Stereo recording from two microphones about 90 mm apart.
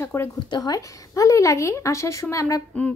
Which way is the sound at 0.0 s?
30° left (ahead or behind).